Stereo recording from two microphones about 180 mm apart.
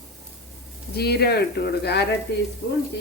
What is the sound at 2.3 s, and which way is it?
Sizzle, 65° left (ahead or behind).